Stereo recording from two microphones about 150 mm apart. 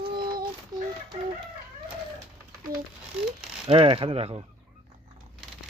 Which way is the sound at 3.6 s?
40° right (ahead or behind).